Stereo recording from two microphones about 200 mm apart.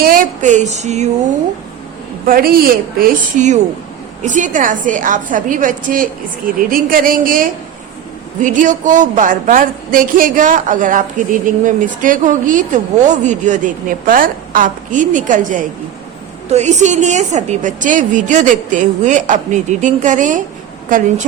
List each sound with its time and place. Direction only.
0.0 s speech: 45° right (ahead or behind)
2.2 s speech: 45° right (ahead or behind)